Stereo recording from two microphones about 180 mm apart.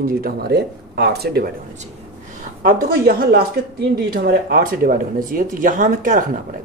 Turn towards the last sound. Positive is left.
turn(degrees=-45)  # may be behind; listen again after turning